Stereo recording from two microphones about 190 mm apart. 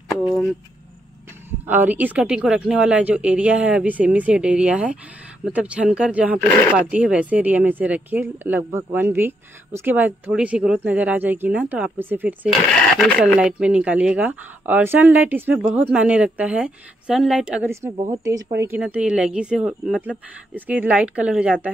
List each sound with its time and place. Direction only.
0.2 s speech: centre (ahead or behind)
1.7 s speech: 10° right (ahead or behind)
12.6 s speech: 5° left (ahead or behind)